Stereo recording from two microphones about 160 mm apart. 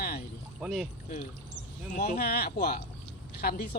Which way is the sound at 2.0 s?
75° left (ahead or behind).